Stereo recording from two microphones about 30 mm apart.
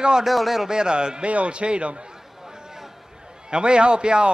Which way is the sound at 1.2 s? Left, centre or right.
Right.